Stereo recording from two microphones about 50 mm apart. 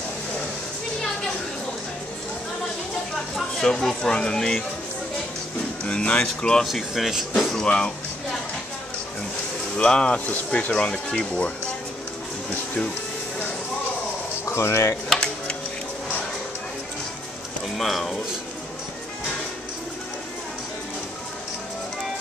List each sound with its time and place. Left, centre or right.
3.5 s speech: centre
5.9 s speech: left
6.6 s speech: centre
7.6 s a sound: centre
9.8 s speech: centre
14.5 s speech: left
15.1 s a sound: centre
17.7 s speech: centre